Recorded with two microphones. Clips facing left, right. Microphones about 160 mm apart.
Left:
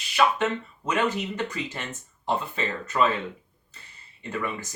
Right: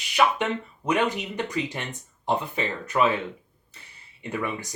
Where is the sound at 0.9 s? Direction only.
15° right (ahead or behind).